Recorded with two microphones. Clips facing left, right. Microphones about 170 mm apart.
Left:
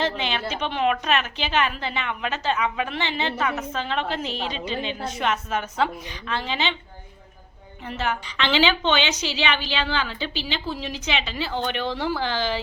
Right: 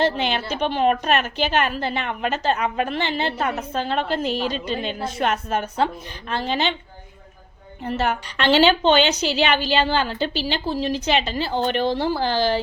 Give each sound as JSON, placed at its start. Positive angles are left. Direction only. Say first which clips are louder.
{"t": 0.0, "sound": "a woman's voice", "louder": "right 4 dB", "side_deg": -45}
{"t": 8.8, "sound": "a woman's voice", "louder": "right 6 dB", "side_deg": -35}